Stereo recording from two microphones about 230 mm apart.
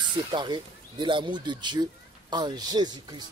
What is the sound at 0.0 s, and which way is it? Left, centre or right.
Speech, centre.